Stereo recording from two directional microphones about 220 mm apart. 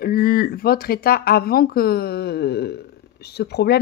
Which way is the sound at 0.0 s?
45° left (ahead or behind).